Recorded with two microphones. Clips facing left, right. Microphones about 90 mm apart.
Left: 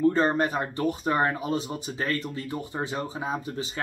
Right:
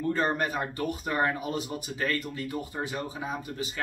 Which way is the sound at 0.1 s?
30° left (ahead or behind).